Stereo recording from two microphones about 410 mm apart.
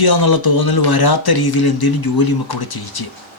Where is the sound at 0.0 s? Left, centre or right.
Left.